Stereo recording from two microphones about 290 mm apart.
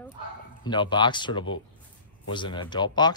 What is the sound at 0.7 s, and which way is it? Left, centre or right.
A man's voice, centre.